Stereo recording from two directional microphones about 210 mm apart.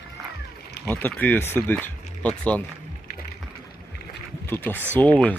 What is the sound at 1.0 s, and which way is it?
Speech, 10° left (ahead or behind).